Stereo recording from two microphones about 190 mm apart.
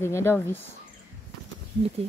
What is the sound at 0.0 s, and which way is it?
Speech, 15° left (ahead or behind).